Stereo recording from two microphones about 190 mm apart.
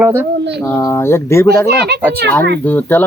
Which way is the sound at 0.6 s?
15° left (ahead or behind).